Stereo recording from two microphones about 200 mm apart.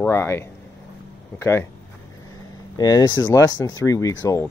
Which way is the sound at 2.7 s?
20° left (ahead or behind).